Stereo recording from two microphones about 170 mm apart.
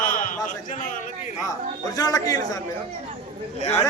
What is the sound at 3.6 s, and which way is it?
Speech, 40° left (ahead or behind).